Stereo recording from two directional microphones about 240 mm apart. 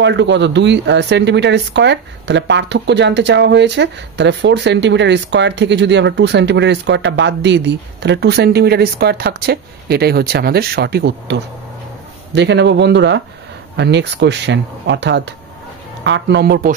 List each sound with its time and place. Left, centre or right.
0.0 s speech: right